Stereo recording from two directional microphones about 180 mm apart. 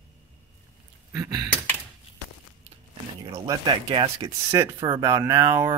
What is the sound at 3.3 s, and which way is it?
Speech, 20° right (ahead or behind).